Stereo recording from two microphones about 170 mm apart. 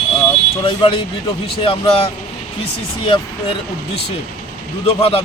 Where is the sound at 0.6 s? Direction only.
30° left (ahead or behind).